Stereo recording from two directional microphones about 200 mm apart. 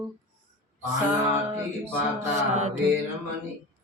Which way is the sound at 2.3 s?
35° right (ahead or behind).